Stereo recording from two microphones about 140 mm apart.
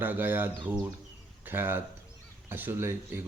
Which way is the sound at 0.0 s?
15° right (ahead or behind).